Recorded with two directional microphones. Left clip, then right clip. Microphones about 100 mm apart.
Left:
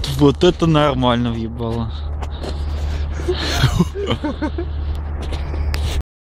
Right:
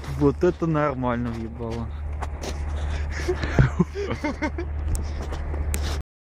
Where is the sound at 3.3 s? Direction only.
40° left (ahead or behind).